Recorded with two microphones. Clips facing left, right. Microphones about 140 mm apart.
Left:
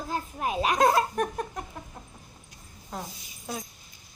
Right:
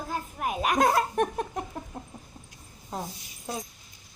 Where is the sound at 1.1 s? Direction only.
30° right (ahead or behind).